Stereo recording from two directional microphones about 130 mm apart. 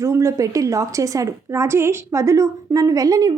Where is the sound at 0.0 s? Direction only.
25° right (ahead or behind).